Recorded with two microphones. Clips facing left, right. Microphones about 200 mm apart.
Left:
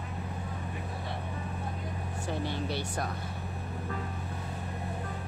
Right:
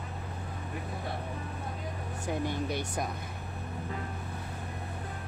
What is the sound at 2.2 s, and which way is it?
Speech, 15° right (ahead or behind).